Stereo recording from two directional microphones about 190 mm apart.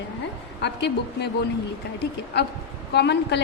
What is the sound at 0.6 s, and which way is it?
Speech, 60° left (ahead or behind).